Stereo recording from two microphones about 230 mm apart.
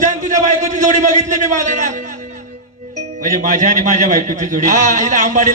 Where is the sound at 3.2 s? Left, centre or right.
Right.